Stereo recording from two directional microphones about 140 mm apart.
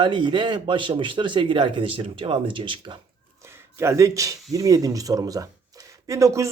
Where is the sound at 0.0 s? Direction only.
35° right (ahead or behind).